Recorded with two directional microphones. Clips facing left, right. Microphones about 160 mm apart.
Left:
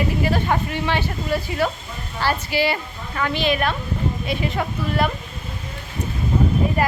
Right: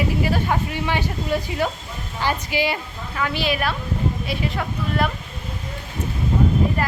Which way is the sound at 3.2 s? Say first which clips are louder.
Left 2 dB; 5° right (ahead or behind).